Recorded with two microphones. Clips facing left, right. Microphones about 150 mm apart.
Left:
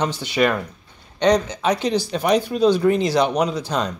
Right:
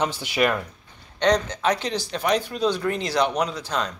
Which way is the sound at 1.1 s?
10° left (ahead or behind).